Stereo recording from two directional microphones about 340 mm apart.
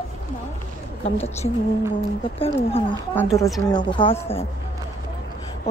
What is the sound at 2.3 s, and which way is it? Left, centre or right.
Speech, centre.